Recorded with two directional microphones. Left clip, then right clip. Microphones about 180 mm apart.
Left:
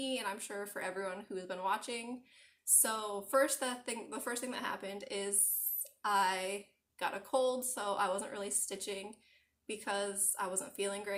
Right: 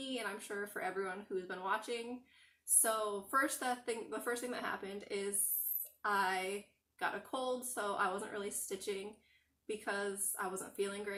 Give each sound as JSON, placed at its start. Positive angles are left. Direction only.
{"t": 0.0, "sound": "speech", "side_deg": 25}